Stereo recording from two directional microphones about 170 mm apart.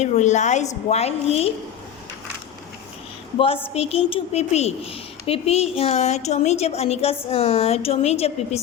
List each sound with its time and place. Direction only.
0.0 s speech: 45° left (ahead or behind)
3.3 s speech: 35° left (ahead or behind)